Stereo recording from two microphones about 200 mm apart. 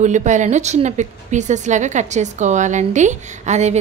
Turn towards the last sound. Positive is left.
turn(degrees=-35)  # may be behind; listen again after turning